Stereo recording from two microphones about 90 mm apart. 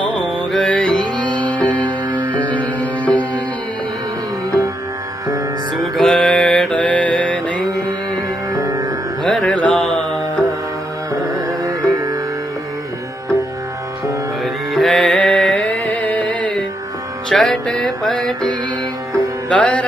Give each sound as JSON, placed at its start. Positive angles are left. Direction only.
{"t": 0.5, "sound": "music", "side_deg": 5}
{"t": 2.0, "sound": "music", "side_deg": -20}
{"t": 2.4, "sound": "music", "side_deg": 15}
{"t": 5.9, "sound": "mantra", "side_deg": 5}
{"t": 8.6, "sound": "music", "side_deg": -40}
{"t": 9.2, "sound": "music", "side_deg": 0}
{"t": 9.5, "sound": "mantra", "side_deg": 15}
{"t": 9.8, "sound": "mantra", "side_deg": 0}
{"t": 11.6, "sound": "music", "side_deg": -45}
{"t": 14.4, "sound": "music", "side_deg": 0}